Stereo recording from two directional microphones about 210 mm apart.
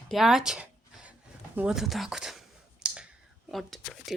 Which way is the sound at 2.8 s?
5° right (ahead or behind).